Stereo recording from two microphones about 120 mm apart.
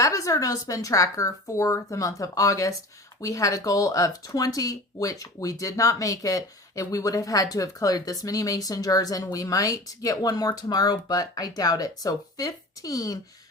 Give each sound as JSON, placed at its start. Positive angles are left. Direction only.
{"t": 0.0, "sound": "speech", "side_deg": 30}